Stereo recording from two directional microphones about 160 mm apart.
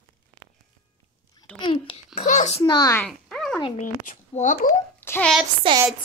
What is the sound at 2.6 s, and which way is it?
Speech, 25° left (ahead or behind).